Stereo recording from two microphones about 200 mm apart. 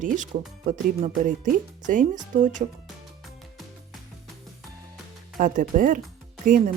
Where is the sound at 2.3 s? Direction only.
40° right (ahead or behind).